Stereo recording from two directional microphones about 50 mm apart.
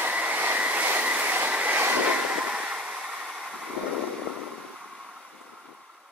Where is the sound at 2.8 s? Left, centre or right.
Centre.